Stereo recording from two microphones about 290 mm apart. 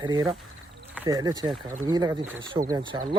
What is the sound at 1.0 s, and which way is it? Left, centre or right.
Speech, centre.